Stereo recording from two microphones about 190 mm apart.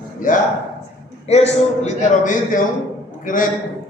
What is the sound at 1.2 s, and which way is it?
A man's voice, 35° left (ahead or behind).